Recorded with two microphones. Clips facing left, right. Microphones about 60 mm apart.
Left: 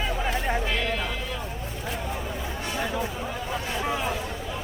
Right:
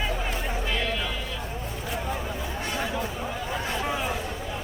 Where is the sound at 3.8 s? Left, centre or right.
Centre.